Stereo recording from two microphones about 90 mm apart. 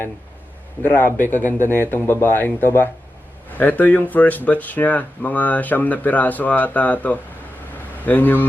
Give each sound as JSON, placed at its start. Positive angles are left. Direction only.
{"t": 0.8, "sound": "speech", "side_deg": 20}
{"t": 1.5, "sound": "speech", "side_deg": -30}
{"t": 1.9, "sound": "speech", "side_deg": 25}